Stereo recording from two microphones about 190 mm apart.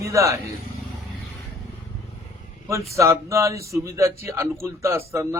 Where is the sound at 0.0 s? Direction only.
15° right (ahead or behind).